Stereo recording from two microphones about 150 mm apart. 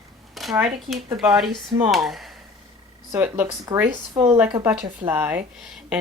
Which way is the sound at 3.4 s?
25° right (ahead or behind).